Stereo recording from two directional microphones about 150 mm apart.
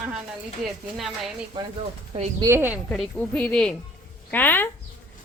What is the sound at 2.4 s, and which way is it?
Speech, 15° right (ahead or behind).